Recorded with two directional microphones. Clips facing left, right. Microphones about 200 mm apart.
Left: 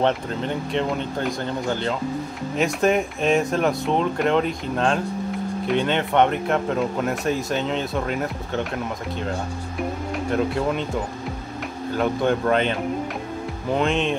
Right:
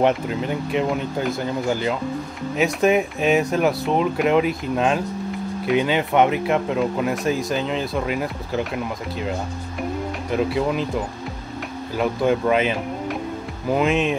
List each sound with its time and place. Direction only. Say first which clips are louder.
0.0 s speech: right 2 dB; 10° right (ahead or behind)
10.3 s speech: right 2 dB; centre (ahead or behind)
11.9 s speech: right 1 dB; 5° right (ahead or behind)